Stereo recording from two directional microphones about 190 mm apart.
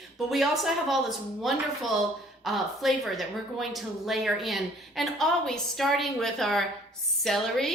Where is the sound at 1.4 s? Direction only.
Centre (ahead or behind).